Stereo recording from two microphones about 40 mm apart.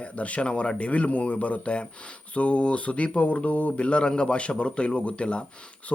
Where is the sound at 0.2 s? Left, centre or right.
Left.